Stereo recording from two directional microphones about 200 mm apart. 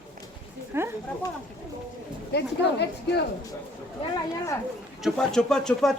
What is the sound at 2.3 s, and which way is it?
Speech, 60° left (ahead or behind).